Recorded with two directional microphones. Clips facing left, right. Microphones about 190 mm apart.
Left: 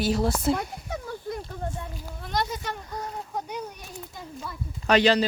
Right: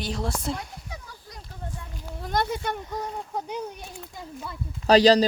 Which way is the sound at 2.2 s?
50° right (ahead or behind).